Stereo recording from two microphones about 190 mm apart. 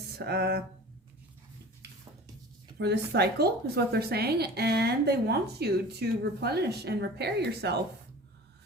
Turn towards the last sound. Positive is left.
turn(degrees=-60)  # may be behind; listen again after turning